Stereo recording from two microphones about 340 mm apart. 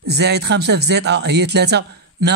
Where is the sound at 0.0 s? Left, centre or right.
Right.